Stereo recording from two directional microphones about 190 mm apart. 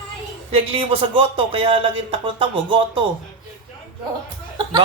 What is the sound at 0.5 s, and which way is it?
Speech, 30° right (ahead or behind).